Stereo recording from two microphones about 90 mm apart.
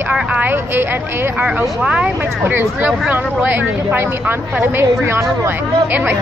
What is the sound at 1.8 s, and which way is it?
Speech, 15° right (ahead or behind).